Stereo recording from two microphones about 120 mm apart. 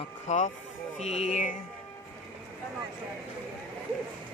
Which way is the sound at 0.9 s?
70° left (ahead or behind).